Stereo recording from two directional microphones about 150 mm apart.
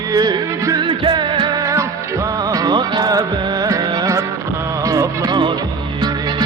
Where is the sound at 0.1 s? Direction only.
25° right (ahead or behind).